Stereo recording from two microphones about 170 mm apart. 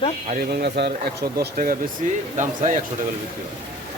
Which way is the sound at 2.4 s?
45° right (ahead or behind).